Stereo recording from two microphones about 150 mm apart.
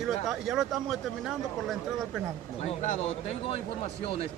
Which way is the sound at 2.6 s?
50° left (ahead or behind).